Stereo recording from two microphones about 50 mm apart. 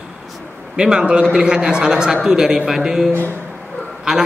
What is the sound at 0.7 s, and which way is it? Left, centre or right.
A man's voice, centre.